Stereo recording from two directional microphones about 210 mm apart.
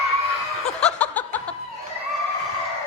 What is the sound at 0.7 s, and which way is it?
Snicker, 5° left (ahead or behind).